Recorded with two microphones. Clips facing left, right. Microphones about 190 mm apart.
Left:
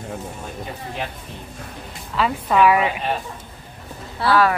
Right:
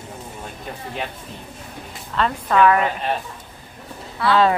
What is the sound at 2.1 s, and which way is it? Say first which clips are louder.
Speech: even; 5° left (ahead or behind).